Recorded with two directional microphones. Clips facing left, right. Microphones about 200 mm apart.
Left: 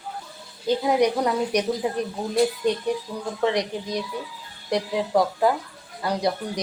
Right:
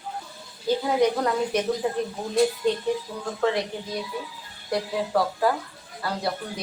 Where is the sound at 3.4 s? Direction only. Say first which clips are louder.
Left 1 dB; 15° left (ahead or behind).